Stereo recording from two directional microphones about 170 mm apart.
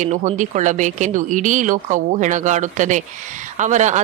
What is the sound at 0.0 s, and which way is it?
Speech, 45° right (ahead or behind).